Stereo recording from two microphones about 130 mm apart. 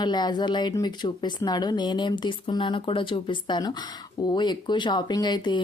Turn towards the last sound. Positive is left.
turn(degrees=35)  # may be behind; listen again after turning